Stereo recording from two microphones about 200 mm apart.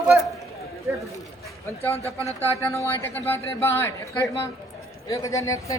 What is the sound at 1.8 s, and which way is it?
A man's voice, 15° left (ahead or behind).